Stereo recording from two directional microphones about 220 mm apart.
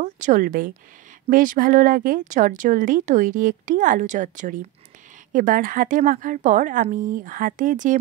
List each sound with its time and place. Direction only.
0.0 s speech: 35° right (ahead or behind)